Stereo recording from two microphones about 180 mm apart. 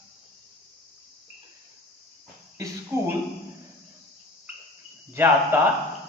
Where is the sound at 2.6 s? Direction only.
15° right (ahead or behind).